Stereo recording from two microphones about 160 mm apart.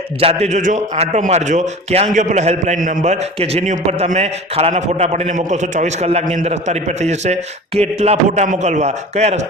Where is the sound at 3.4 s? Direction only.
40° right (ahead or behind).